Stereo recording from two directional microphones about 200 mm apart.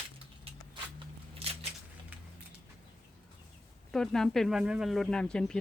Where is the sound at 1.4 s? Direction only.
30° right (ahead or behind).